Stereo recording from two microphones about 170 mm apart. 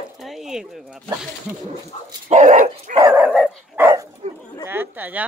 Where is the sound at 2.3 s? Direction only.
45° right (ahead or behind).